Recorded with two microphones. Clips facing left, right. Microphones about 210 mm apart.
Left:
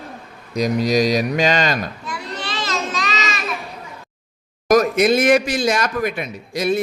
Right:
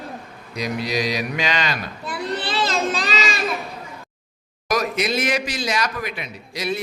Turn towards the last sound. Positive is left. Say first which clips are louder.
# left 6 dB
turn(degrees=50)  # may be behind; listen again after turning